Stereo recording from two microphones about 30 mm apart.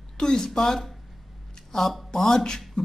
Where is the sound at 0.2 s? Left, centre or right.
Left.